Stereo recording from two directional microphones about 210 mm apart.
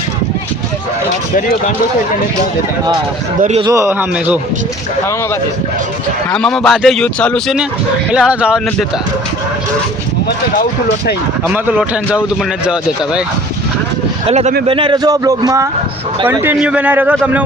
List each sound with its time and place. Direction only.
3.6 s a man's voice: 15° right (ahead or behind)
6.3 s speech: 5° left (ahead or behind)
10.2 s speech: 50° left (ahead or behind)
11.5 s a man's voice: 5° right (ahead or behind)
14.3 s a man's voice: 30° right (ahead or behind); by 17.4 s 10° right (ahead or behind)